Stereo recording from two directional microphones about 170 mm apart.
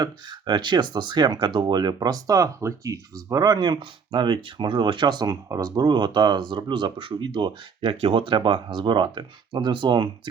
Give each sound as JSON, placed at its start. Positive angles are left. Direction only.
{"t": 0.0, "sound": "speech", "side_deg": -25}